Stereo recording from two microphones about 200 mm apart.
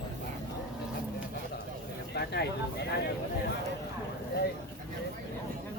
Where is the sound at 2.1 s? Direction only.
55° left (ahead or behind).